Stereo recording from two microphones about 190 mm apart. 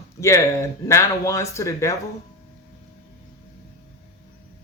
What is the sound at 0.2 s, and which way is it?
Speech, 15° left (ahead or behind).